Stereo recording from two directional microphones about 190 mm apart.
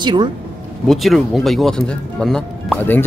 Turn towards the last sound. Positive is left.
turn(degrees=10)  # may be behind; listen again after turning